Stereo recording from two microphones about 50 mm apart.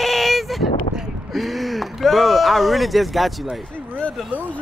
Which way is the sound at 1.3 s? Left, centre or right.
Centre.